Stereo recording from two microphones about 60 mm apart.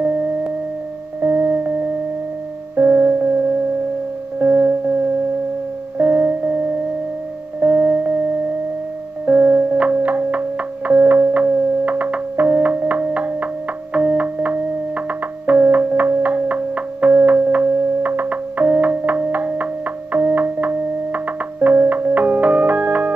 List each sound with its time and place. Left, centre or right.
0.0 s music: right
4.4 s music: right
5.9 s music: right
9.2 s music: right